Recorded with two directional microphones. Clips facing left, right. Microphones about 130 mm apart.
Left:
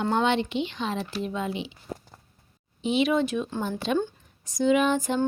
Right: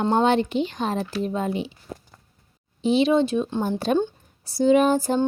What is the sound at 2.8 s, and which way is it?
Speech, 30° right (ahead or behind).